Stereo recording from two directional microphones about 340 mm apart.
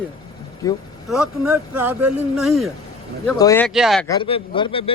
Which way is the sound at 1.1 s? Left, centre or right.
Centre.